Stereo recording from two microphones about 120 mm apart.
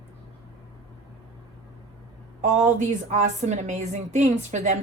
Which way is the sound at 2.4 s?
90° right.